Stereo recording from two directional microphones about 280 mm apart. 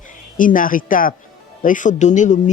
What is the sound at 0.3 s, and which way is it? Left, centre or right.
Speech, left.